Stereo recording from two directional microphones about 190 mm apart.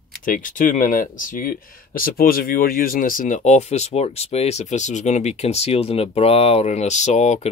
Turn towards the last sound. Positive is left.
turn(degrees=40)  # may be behind; listen again after turning